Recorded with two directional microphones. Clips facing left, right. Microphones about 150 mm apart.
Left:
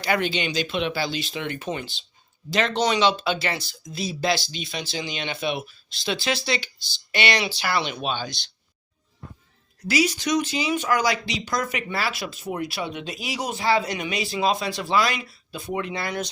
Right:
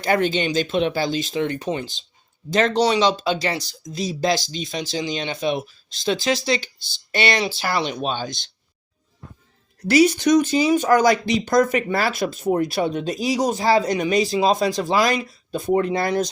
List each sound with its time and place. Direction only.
0.0 s speech: 45° right (ahead or behind)
9.8 s speech: 55° right (ahead or behind)